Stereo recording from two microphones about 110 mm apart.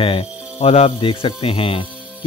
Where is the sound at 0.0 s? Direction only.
60° left (ahead or behind).